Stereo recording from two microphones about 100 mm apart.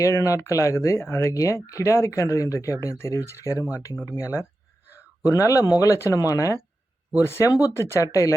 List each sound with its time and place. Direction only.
0.0 s speech: 30° left (ahead or behind)
4.9 s a sound: 25° left (ahead or behind)
5.5 s speech: 35° left (ahead or behind)